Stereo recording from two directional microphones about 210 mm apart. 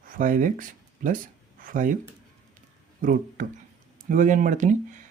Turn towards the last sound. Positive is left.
turn(degrees=-35)  # may be behind; listen again after turning